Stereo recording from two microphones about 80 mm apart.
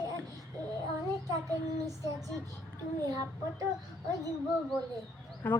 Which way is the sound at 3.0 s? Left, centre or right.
Right.